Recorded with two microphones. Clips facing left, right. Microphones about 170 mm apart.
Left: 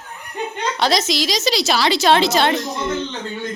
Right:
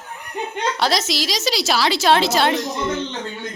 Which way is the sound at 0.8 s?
5° right (ahead or behind).